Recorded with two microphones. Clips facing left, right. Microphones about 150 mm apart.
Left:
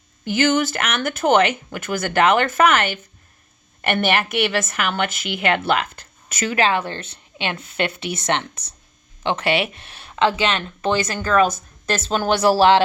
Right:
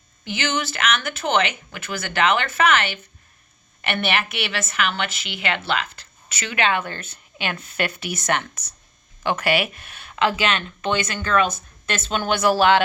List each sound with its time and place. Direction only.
0.3 s speech: 45° left (ahead or behind)
4.0 s speech: 45° left (ahead or behind)